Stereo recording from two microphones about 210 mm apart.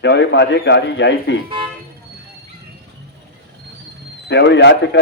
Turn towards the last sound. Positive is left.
turn(degrees=55)  # may be behind; listen again after turning